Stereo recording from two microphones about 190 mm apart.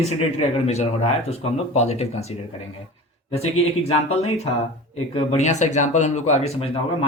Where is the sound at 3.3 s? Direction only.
35° left (ahead or behind).